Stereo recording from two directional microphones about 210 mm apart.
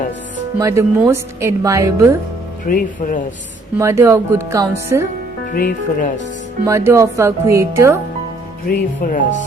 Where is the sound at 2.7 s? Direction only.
40° left (ahead or behind).